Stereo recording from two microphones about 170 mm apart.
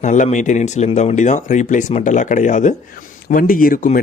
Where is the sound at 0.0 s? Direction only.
45° left (ahead or behind).